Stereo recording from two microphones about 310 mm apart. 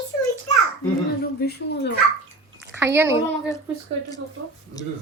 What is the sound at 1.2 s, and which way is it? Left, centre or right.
Speech, left.